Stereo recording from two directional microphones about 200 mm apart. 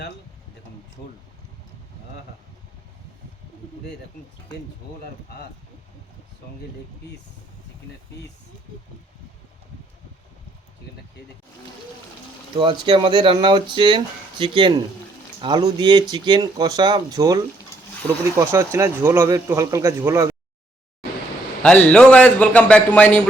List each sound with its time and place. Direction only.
12.5 s speech: 25° right (ahead or behind)
18.5 s speech: 15° right (ahead or behind)
21.6 s a man's voice: 5° left (ahead or behind)